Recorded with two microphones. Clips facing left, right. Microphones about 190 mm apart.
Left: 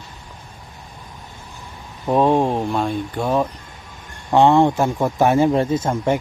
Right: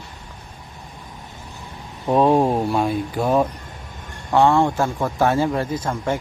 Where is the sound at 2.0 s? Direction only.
Centre (ahead or behind).